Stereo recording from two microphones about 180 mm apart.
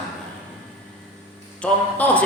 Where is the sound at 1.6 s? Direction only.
10° left (ahead or behind).